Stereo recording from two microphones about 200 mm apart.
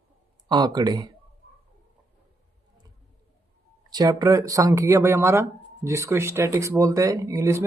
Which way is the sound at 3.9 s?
20° right (ahead or behind).